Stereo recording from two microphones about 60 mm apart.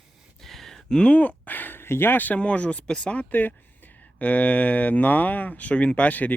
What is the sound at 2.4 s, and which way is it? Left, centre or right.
Speech, centre.